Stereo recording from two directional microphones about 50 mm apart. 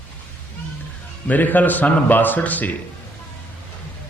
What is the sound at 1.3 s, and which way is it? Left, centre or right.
Speech, left.